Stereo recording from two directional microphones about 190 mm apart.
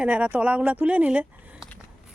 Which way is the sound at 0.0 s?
5° right (ahead or behind).